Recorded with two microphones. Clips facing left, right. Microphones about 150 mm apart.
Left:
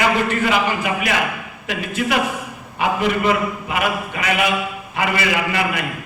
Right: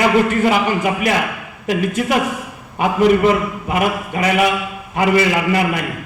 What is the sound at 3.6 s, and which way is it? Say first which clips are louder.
A man's voice: right 3 dB; 40° right (ahead or behind).